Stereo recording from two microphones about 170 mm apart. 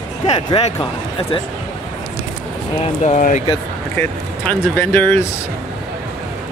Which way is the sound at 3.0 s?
45° left (ahead or behind).